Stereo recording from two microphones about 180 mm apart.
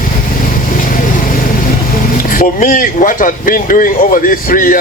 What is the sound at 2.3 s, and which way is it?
Speech, 50° left (ahead or behind).